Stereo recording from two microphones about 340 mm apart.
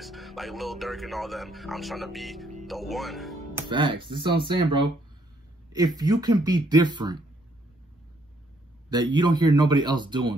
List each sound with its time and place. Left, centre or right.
0.0 s speech: centre
3.6 s a man's voice: centre
8.9 s a man's voice: centre